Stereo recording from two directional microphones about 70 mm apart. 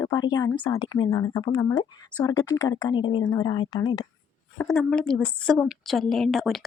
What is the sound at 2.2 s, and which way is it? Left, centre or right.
A woman's voice, left.